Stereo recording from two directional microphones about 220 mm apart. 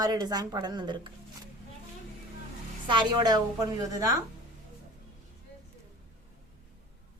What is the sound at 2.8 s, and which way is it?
Speech, 20° right (ahead or behind).